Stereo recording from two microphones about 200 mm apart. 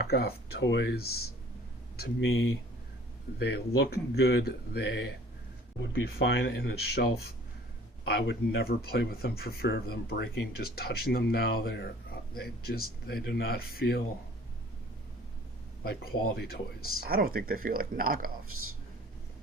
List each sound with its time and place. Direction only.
0.0 s speech: 50° left (ahead or behind); by 2.6 s 75° left (ahead or behind)
3.3 s speech: 55° left (ahead or behind)
15.8 s speech: 50° left (ahead or behind)
17.0 s speech: 50° right (ahead or behind)